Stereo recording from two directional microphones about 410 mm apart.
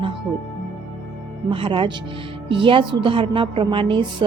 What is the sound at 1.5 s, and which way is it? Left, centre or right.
Speech, centre.